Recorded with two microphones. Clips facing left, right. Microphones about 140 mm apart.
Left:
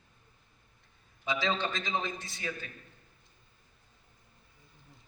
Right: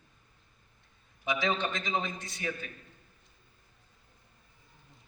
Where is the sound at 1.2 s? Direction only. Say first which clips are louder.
Right 1 dB; 20° right (ahead or behind).